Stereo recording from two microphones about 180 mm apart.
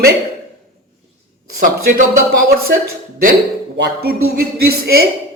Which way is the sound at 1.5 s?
50° right (ahead or behind).